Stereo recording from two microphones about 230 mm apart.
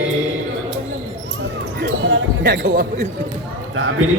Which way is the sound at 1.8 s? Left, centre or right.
Right.